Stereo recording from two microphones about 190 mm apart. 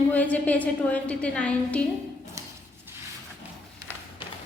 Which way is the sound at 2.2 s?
15° right (ahead or behind).